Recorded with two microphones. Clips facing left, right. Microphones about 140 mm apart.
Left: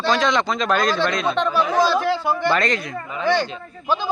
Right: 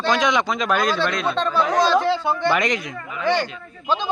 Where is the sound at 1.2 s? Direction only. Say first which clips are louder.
Left 1 dB; 15° left (ahead or behind).